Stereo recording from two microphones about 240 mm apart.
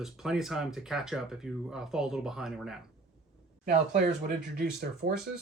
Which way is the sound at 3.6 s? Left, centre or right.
Right.